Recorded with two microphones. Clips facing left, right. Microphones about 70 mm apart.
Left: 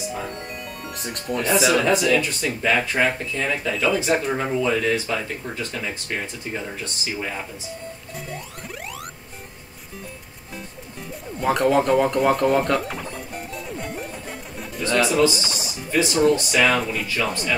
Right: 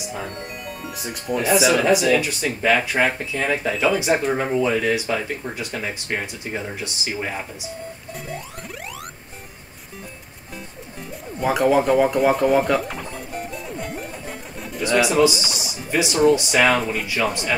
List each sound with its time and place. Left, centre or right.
0.7 s speech: centre
7.2 s speech: right
11.3 s a sound: centre
14.8 s speech: centre